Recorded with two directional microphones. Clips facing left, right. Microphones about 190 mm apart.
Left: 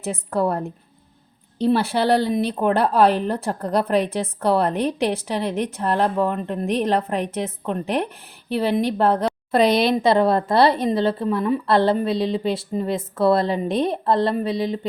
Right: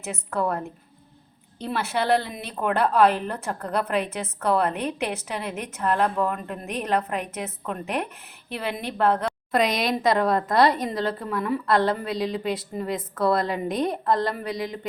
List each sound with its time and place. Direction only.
0.0 s a woman's voice: 30° left (ahead or behind)